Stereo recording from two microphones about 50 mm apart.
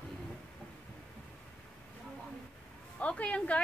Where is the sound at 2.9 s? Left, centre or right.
Left.